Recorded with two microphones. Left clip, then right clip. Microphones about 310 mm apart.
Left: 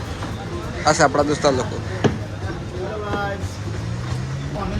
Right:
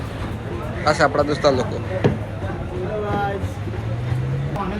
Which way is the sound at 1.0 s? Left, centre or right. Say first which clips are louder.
Right 1 dB; centre.